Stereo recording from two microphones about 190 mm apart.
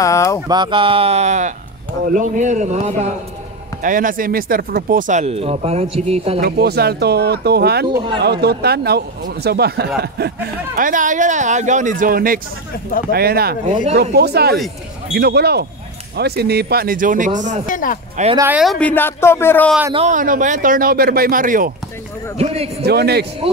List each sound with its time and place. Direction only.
0.0 s a sound: 15° left (ahead or behind)
0.5 s a man's voice: 25° right (ahead or behind)
6.4 s speech: 55° right (ahead or behind)
10.8 s speech: 45° right (ahead or behind)
17.6 s speech: 45° left (ahead or behind)
18.2 s a man's voice: 40° right (ahead or behind)
18.5 s speech: centre (ahead or behind)
19.9 s speech: 35° right (ahead or behind)
22.4 s a man's voice: 30° right (ahead or behind)
22.8 s speech: 55° right (ahead or behind)